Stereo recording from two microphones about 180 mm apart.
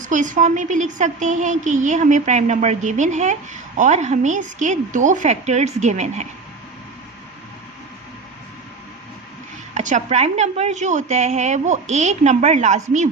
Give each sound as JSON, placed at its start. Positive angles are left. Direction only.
{"t": 0.0, "sound": "a woman's voice", "side_deg": -45}
{"t": 9.7, "sound": "a woman's voice", "side_deg": -40}